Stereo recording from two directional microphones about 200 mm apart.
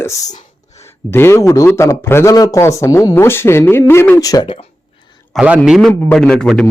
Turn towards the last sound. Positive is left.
turn(degrees=5)  # may be behind; listen again after turning